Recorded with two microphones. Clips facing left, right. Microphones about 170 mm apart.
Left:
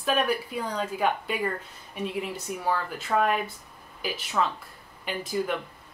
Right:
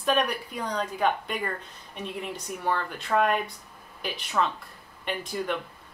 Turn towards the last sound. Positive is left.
turn(degrees=5)  # may be behind; listen again after turning